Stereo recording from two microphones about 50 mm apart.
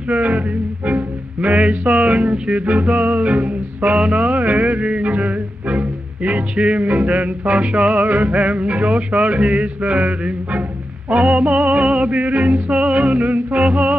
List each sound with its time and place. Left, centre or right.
0.1 s music: right